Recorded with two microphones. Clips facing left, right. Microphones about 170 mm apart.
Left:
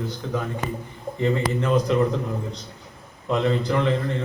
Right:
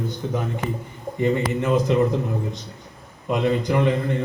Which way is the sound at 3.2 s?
15° right (ahead or behind).